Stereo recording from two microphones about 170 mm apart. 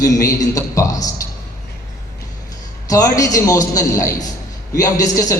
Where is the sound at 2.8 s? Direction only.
20° left (ahead or behind).